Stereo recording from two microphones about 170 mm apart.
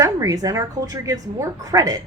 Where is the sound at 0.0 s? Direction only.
20° right (ahead or behind).